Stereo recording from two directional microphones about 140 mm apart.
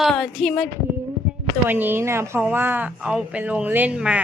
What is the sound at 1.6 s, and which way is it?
Speech, 15° right (ahead or behind).